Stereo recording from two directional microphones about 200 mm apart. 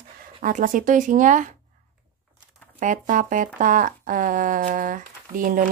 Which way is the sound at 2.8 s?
40° right (ahead or behind).